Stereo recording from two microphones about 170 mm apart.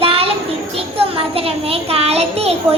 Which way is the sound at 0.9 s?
35° right (ahead or behind).